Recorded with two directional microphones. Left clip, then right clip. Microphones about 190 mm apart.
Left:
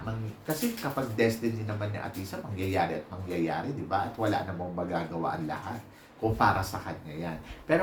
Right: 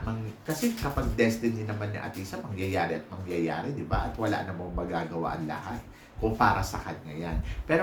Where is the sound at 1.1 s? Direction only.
5° right (ahead or behind).